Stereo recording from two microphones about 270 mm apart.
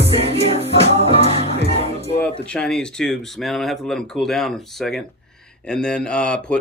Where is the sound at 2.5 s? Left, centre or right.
Centre.